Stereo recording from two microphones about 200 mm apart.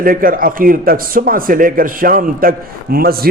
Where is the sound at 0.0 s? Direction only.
45° right (ahead or behind).